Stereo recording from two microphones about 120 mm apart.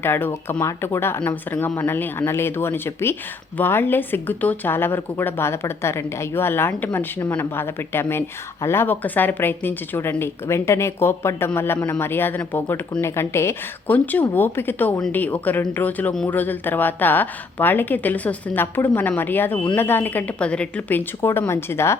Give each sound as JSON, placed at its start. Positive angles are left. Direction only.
{"t": 0.0, "sound": "a woman's voice", "side_deg": 20}
{"t": 21.2, "sound": "speech", "side_deg": 20}